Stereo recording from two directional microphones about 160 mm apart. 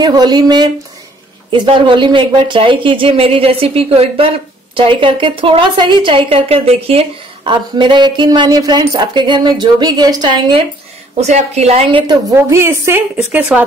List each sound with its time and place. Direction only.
0.0 s a woman's voice: 25° right (ahead or behind)
11.1 s speech: 45° right (ahead or behind)
12.1 s a woman's voice: 20° right (ahead or behind)